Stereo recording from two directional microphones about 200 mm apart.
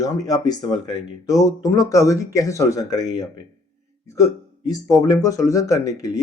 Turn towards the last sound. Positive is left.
turn(degrees=15)  # may be behind; listen again after turning